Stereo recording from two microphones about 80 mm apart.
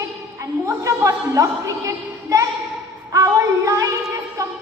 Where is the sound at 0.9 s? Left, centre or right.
Right.